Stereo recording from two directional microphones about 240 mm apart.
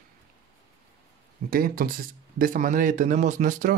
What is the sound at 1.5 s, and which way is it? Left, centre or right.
Speech, right.